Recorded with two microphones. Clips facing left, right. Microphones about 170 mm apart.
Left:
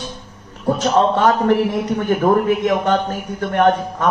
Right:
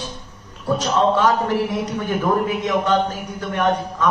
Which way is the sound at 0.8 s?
50° left (ahead or behind).